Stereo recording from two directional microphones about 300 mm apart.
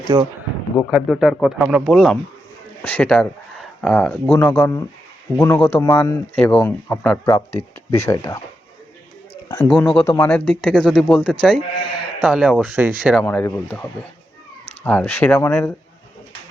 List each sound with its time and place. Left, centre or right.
0.1 s speech: centre
9.6 s speech: centre
11.8 s sheep: centre
12.2 s speech: centre
14.8 s speech: centre